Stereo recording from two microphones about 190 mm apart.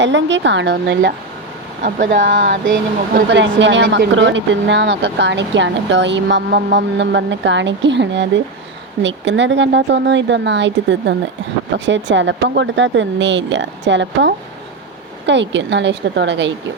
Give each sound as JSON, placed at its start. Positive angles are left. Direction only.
{"t": 0.0, "sound": "speech", "side_deg": -70}
{"t": 1.8, "sound": "speech", "side_deg": -45}
{"t": 3.2, "sound": "speech", "side_deg": -65}
{"t": 3.8, "sound": "speech", "side_deg": -60}